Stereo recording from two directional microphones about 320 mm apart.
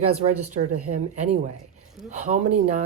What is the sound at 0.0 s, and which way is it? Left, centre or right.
Speech, centre.